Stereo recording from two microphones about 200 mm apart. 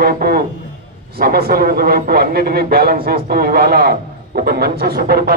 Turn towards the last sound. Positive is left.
turn(degrees=-45)  # may be behind; listen again after turning